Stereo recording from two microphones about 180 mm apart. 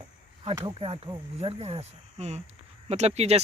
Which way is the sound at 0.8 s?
30° right (ahead or behind).